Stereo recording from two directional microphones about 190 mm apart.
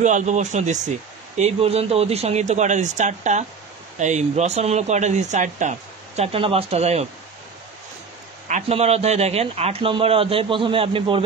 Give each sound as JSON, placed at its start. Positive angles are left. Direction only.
{"t": 0.0, "sound": "speech", "side_deg": -40}
{"t": 8.5, "sound": "speech", "side_deg": -35}